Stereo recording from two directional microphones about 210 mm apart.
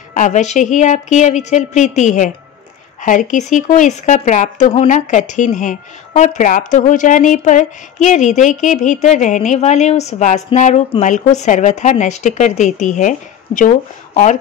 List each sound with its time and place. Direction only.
0.1 s speech: 35° left (ahead or behind)